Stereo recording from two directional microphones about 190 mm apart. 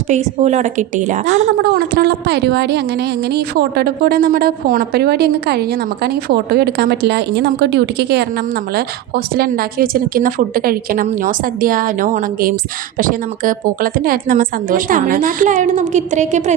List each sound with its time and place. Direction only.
0.1 s a woman's voice: 40° right (ahead or behind)
1.6 s a woman's voice: 55° right (ahead or behind); by 16.6 s 40° right (ahead or behind)